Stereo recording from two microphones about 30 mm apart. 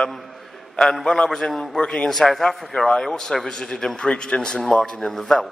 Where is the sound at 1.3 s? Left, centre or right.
Left.